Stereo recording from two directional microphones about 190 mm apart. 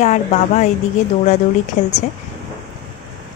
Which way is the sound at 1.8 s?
35° left (ahead or behind).